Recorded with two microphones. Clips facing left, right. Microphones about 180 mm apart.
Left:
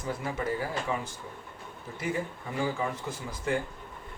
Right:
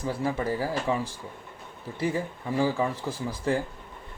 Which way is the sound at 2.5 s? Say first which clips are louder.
Right 5 dB; 35° right (ahead or behind).